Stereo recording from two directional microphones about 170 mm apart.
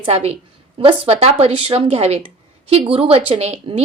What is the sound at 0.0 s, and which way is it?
A woman's voice, 35° right (ahead or behind).